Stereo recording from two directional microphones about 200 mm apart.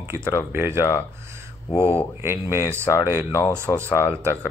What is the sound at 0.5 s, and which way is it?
Speech, 10° right (ahead or behind).